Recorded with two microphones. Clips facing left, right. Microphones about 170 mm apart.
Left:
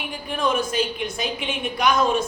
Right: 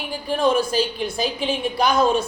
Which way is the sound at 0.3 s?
30° right (ahead or behind).